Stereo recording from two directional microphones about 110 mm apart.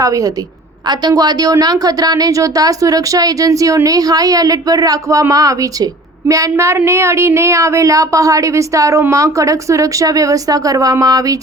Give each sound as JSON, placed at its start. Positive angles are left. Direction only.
{"t": 0.0, "sound": "a woman's voice", "side_deg": -30}